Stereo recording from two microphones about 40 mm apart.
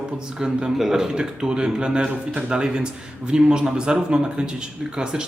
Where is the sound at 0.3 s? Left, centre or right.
Centre.